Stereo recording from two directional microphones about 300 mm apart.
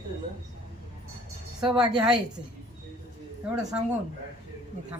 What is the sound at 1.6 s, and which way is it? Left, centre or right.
Speech, centre.